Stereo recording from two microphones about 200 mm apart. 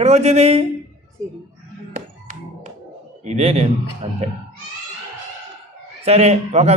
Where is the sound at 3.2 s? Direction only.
35° right (ahead or behind).